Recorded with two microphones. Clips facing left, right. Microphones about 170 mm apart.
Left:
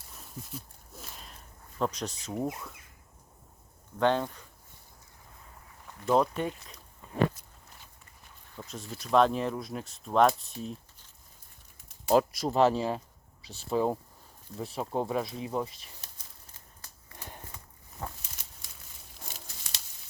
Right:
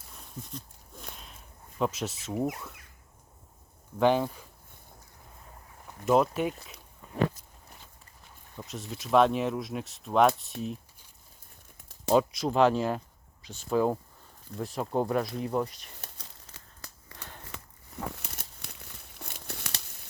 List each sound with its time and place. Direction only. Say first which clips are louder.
0.1 s a sound: right 1 dB; 5° left (ahead or behind)
3.9 s speech: right 2 dB; 10° right (ahead or behind)
6.1 s speech: right 2 dB; 5° right (ahead or behind)
8.6 s speech: right 2 dB; centre (ahead or behind)
12.1 s speech: even; centre (ahead or behind)
16.0 s crumpling: right 5 dB; 75° right (ahead or behind)
17.2 s walk: left 1 dB; 15° left (ahead or behind)
18.2 s crumpling: right 6 dB; 65° right (ahead or behind)
19.5 s tearing: right 9 dB; 65° right (ahead or behind)